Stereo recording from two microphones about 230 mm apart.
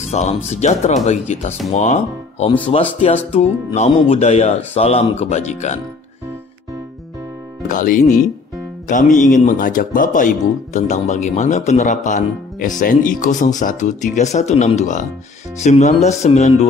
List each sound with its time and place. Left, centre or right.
0.1 s speech: left
7.6 s speech: left